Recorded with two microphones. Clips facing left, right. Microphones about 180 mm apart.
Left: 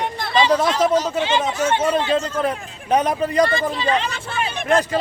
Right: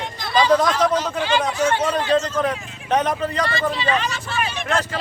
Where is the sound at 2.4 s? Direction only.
10° left (ahead or behind).